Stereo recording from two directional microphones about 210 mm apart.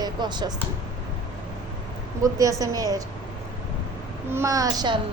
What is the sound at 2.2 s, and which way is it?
Speech, 15° right (ahead or behind).